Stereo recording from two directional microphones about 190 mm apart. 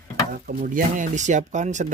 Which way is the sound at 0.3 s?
45° right (ahead or behind).